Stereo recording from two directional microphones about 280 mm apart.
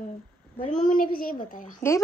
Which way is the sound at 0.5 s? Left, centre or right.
Left.